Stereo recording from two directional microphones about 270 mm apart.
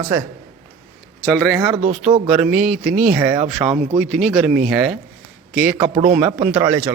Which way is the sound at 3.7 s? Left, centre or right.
Right.